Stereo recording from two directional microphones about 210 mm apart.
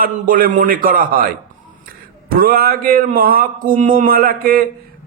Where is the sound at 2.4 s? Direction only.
45° right (ahead or behind).